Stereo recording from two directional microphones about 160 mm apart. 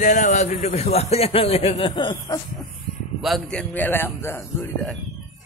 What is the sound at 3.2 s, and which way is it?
A man's voice, 5° left (ahead or behind).